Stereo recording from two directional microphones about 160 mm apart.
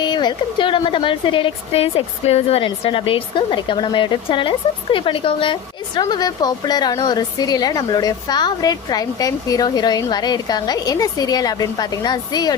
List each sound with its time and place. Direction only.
0.0 s a woman's voice: 25° left (ahead or behind)